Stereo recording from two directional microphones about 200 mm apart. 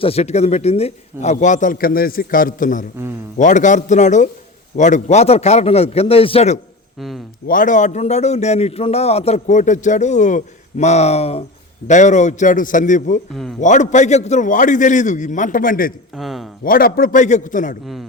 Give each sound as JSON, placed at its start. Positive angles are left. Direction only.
{"t": 0.0, "sound": "a man's voice", "side_deg": 30}
{"t": 7.4, "sound": "a man's voice", "side_deg": 40}
{"t": 16.1, "sound": "speech", "side_deg": 0}
{"t": 16.6, "sound": "a man's voice", "side_deg": 45}